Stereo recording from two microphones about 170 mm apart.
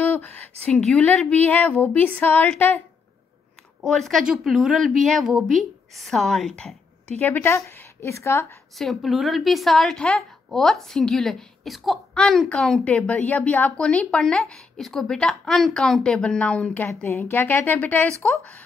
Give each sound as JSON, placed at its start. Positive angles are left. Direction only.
{"t": 0.0, "sound": "speech", "side_deg": 10}
{"t": 3.8, "sound": "a woman's voice", "side_deg": 0}
{"t": 8.7, "sound": "a woman's voice", "side_deg": 0}